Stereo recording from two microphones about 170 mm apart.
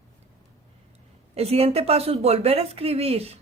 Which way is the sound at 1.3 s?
35° right (ahead or behind).